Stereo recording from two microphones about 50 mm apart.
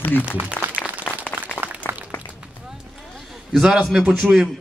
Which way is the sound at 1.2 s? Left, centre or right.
Left.